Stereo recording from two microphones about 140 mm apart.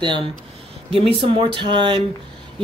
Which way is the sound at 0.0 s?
35° right (ahead or behind).